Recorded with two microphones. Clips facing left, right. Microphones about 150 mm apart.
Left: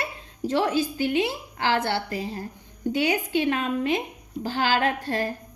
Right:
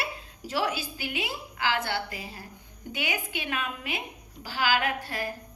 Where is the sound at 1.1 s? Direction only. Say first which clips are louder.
Left 9 dB; 35° left (ahead or behind).